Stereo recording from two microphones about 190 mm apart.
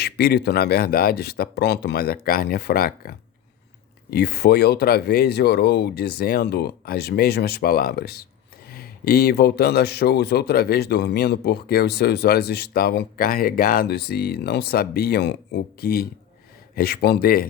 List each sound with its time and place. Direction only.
0.0 s speech: 60° left (ahead or behind)